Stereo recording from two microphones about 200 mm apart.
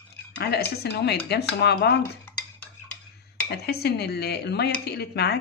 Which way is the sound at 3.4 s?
55° left (ahead or behind).